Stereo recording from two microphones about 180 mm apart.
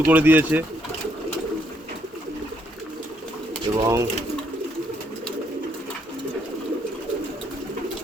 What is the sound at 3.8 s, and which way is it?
Bird, 15° right (ahead or behind).